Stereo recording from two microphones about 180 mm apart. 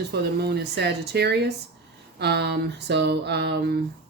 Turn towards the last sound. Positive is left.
turn(degrees=-70)  # may be behind; listen again after turning